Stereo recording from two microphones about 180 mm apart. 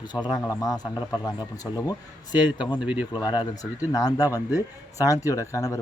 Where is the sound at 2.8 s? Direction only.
10° right (ahead or behind).